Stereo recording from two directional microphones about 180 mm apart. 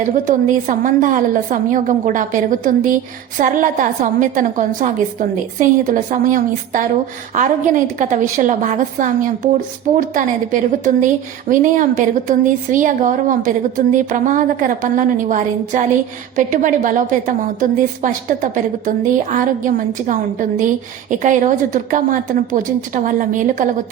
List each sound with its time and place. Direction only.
0.0 s a woman's voice: 45° right (ahead or behind)